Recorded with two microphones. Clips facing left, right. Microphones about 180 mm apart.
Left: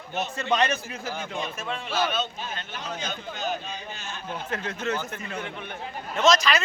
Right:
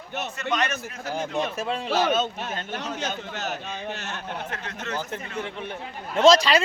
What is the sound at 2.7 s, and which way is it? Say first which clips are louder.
A man's voice: right 3 dB; 75° right (ahead or behind).